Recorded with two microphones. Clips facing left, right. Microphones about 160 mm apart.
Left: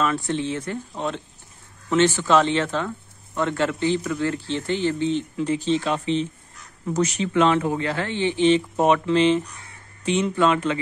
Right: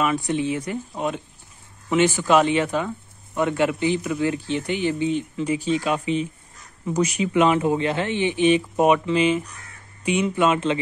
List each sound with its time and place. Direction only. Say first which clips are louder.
0.0 s speech: right 1 dB; 10° right (ahead or behind)